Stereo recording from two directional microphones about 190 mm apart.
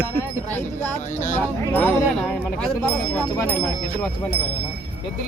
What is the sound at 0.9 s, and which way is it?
Speech, 40° left (ahead or behind).